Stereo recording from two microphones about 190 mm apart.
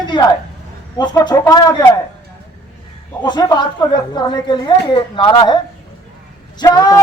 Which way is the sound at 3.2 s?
20° left (ahead or behind).